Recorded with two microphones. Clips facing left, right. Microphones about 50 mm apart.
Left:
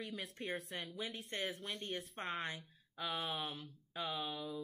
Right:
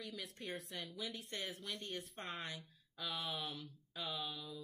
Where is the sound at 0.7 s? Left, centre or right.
Left.